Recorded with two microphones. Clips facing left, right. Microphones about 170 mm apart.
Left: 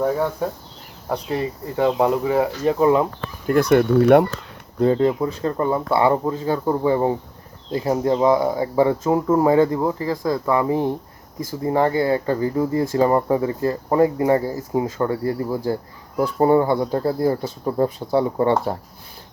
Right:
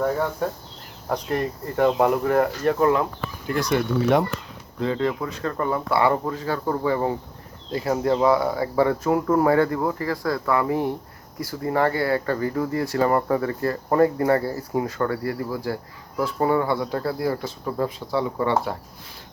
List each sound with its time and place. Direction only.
0.0 s speech: 5° left (ahead or behind)
3.4 s speech: 50° left (ahead or behind)
4.9 s speech: 25° left (ahead or behind)